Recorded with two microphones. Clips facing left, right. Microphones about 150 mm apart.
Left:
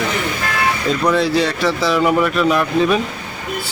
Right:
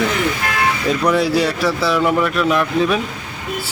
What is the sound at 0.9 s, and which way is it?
Speech, 10° right (ahead or behind).